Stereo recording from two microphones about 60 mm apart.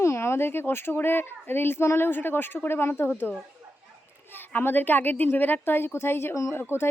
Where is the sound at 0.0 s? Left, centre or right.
Left.